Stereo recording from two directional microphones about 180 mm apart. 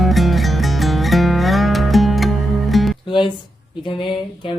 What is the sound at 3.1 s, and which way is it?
Speech, 25° left (ahead or behind).